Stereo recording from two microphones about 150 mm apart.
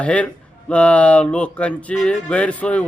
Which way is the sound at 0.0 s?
10° left (ahead or behind).